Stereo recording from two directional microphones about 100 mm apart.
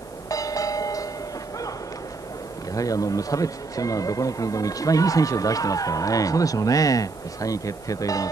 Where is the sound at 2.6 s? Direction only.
35° left (ahead or behind).